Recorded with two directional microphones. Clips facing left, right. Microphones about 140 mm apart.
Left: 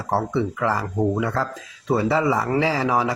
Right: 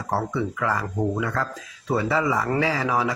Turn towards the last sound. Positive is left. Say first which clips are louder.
# left 2 dB
turn(degrees=30)  # may be behind; listen again after turning